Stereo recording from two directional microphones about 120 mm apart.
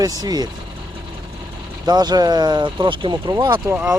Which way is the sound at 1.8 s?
35° right (ahead or behind).